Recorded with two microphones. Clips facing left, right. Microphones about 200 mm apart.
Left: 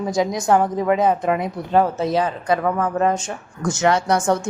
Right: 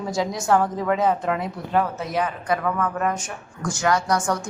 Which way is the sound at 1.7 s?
30° left (ahead or behind).